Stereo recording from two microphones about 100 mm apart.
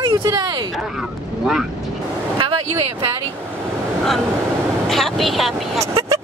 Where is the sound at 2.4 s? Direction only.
60° right (ahead or behind).